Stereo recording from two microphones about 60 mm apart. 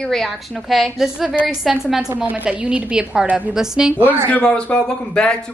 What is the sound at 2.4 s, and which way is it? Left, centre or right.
A woman's voice, centre.